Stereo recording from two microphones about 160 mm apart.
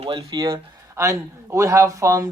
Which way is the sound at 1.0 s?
20° right (ahead or behind).